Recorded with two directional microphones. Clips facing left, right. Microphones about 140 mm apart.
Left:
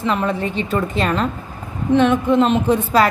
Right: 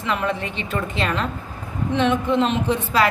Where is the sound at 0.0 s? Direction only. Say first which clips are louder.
Left 4 dB; 35° left (ahead or behind).